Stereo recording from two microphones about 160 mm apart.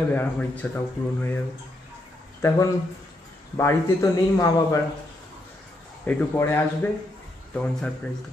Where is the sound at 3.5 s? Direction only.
20° left (ahead or behind).